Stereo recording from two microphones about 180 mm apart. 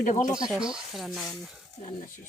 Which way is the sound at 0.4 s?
5° right (ahead or behind).